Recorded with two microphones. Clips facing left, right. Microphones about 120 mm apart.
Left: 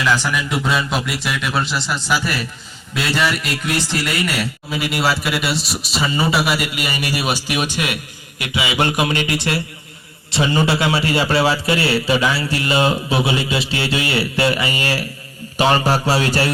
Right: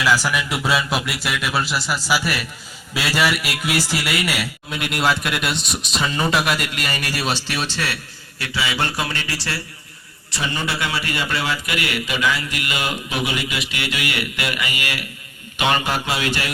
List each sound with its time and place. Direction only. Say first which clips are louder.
0.0 s a man's voice: left 1 dB; 5° right (ahead or behind); by 15.0 s 35° left (ahead or behind)
15.5 s mantra: left 5 dB; 35° left (ahead or behind)